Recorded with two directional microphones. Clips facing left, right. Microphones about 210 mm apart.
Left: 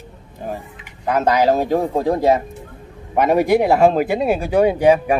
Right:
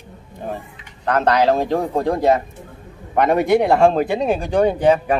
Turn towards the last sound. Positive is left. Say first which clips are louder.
# left 2 dB
turn(degrees=10)  # may be behind; listen again after turning